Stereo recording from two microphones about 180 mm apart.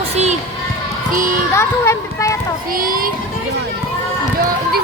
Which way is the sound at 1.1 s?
50° right (ahead or behind).